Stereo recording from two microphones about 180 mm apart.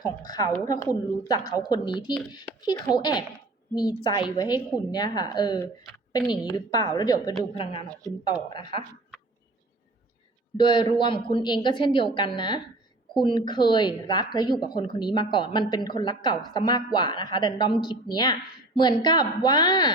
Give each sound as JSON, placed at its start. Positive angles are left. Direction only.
{"t": 0.3, "sound": "a woman's voice", "side_deg": 20}
{"t": 10.6, "sound": "a woman's voice", "side_deg": 25}